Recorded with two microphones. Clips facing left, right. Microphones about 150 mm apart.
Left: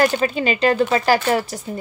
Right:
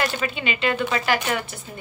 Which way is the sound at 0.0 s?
40° left (ahead or behind).